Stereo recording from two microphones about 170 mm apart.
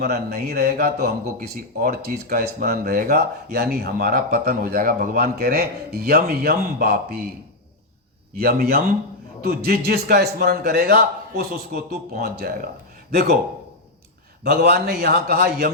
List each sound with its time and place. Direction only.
0.0 s speech: 65° right (ahead or behind)
8.4 s a man's voice: 65° right (ahead or behind)
14.4 s speech: 70° right (ahead or behind)